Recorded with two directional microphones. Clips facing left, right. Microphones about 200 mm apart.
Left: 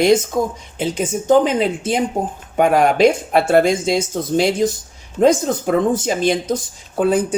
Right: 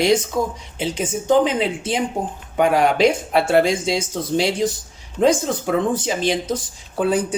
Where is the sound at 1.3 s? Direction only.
45° left (ahead or behind).